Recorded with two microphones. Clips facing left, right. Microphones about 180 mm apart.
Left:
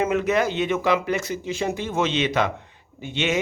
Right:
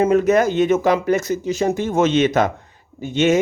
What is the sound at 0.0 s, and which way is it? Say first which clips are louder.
Speech: right 6 dB; 40° right (ahead or behind).